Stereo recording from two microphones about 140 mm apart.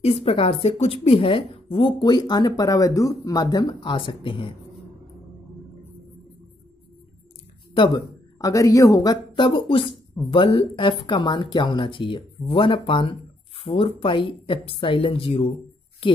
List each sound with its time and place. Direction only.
0.0 s speech: 45° left (ahead or behind)
7.7 s speech: 30° left (ahead or behind)